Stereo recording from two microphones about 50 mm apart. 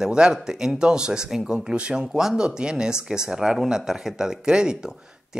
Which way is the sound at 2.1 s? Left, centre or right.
Centre.